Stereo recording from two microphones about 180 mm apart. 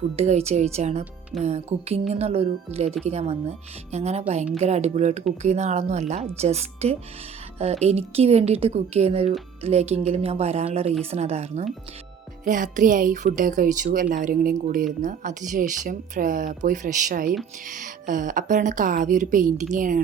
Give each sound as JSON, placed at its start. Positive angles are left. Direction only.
{"t": 0.2, "sound": "speech", "side_deg": -35}